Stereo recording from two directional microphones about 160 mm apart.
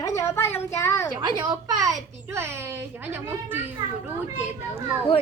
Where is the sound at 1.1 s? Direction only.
25° right (ahead or behind); by 3.6 s 10° right (ahead or behind).